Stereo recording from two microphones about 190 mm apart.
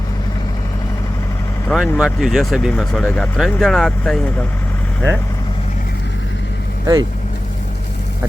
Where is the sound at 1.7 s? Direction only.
Centre (ahead or behind).